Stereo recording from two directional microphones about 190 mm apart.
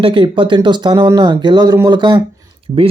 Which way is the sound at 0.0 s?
25° right (ahead or behind).